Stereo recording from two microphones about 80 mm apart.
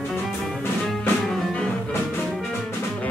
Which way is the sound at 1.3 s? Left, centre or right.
Centre.